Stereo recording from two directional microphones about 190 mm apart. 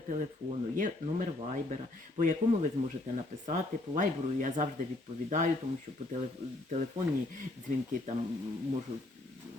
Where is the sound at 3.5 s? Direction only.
40° right (ahead or behind).